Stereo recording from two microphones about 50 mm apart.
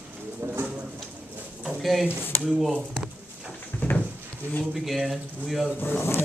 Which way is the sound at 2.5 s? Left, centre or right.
Centre.